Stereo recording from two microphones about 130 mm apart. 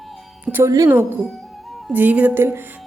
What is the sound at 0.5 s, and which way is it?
A woman's voice, 25° right (ahead or behind).